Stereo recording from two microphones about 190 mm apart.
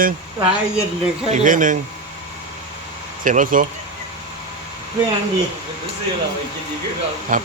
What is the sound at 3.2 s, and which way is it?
Speech, 45° right (ahead or behind).